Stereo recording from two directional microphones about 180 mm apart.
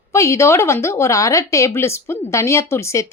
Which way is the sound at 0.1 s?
15° left (ahead or behind).